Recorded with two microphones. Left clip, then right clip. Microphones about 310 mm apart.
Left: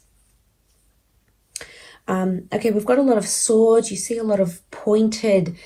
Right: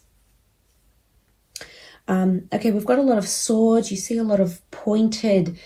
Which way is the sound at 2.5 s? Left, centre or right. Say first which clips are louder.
Left 2 dB; left.